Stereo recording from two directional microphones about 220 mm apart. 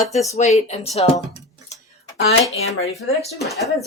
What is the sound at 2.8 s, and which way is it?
Speech, centre (ahead or behind).